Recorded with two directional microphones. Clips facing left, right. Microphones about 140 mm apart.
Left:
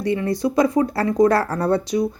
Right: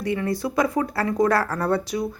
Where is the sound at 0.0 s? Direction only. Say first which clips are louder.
Left 4 dB; 25° left (ahead or behind).